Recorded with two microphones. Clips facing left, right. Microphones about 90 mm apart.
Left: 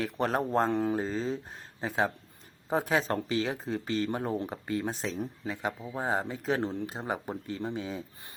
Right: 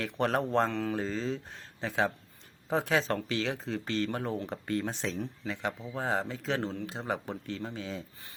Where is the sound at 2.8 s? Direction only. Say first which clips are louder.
Left 1 dB; 35° left (ahead or behind).